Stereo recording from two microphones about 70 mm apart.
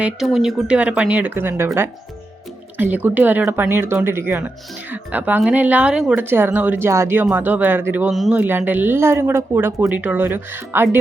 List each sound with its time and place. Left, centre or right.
0.2 s speech: centre
0.7 s speech: centre
1.3 s speech: right
2.7 s speech: right
6.1 s speech: right
6.8 s speech: right
7.3 s speech: right
8.1 s speech: centre
8.4 s speech: right
9.9 s speech: right